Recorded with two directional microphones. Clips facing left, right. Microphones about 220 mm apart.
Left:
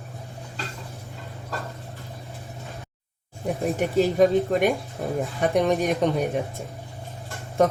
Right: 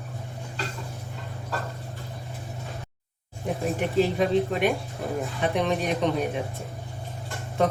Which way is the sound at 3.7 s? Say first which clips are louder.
Left 3 dB; 45° left (ahead or behind).